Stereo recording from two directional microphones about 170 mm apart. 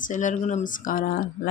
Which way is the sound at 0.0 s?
50° left (ahead or behind).